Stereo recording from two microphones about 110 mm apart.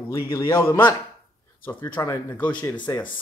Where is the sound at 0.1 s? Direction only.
25° left (ahead or behind).